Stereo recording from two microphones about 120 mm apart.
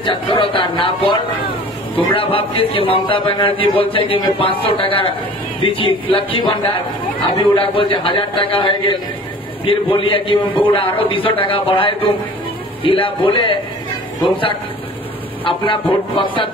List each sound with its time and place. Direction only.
0.0 s speech: 45° left (ahead or behind)
2.1 s speech: 45° left (ahead or behind)